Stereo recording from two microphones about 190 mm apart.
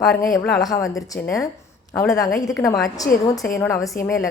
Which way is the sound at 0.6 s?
20° left (ahead or behind).